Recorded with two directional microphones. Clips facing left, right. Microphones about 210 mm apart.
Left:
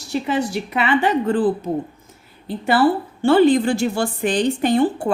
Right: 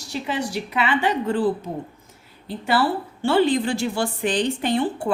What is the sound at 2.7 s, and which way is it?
A woman's voice, 50° left (ahead or behind).